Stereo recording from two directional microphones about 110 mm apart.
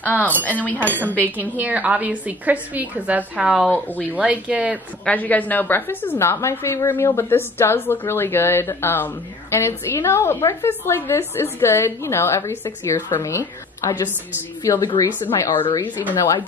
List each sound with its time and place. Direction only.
0.0 s speech: 15° left (ahead or behind)
0.7 s speech: 20° right (ahead or behind)
1.0 s speech: 15° left (ahead or behind)
1.5 s a woman's voice: 15° right (ahead or behind)
3.4 s speech: centre (ahead or behind)
3.7 s speech: 15° left (ahead or behind)
4.1 s a woman's voice: 10° right (ahead or behind)
5.0 s a woman's voice: 15° left (ahead or behind)